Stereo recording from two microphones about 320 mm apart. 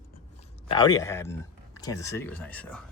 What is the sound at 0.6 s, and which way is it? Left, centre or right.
Speech, centre.